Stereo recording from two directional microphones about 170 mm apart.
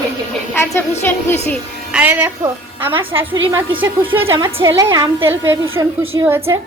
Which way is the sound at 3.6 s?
10° right (ahead or behind).